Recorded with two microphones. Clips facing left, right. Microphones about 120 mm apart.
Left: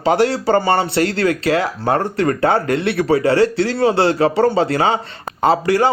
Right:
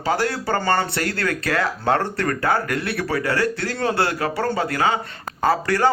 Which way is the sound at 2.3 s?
30° left (ahead or behind).